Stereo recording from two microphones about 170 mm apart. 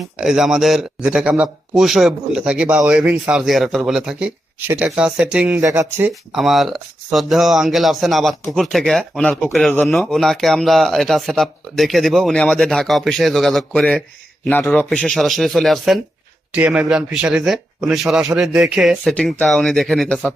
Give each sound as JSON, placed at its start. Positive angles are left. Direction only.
{"t": 0.2, "sound": "speech", "side_deg": -5}
{"t": 5.5, "sound": "speech", "side_deg": -20}
{"t": 6.3, "sound": "speech", "side_deg": 0}